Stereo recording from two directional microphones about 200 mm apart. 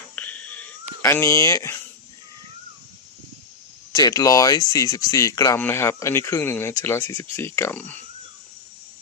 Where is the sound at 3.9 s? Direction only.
15° left (ahead or behind).